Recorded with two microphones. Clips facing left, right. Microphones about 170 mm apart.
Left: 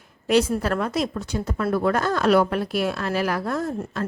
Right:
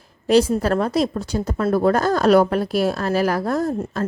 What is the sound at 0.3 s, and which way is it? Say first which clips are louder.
Speech: right 4 dB; 35° right (ahead or behind).